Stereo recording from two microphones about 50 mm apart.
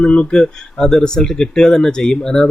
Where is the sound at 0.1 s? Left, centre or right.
Left.